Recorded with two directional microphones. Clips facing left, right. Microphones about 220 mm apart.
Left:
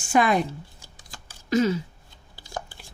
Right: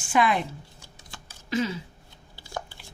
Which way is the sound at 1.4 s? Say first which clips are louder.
Left 6 dB; 45° left (ahead or behind).